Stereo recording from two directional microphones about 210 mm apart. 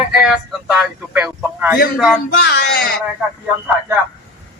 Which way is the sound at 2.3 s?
50° left (ahead or behind).